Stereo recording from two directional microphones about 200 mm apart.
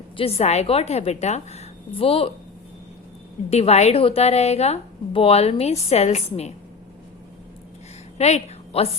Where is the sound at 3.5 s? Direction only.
30° left (ahead or behind).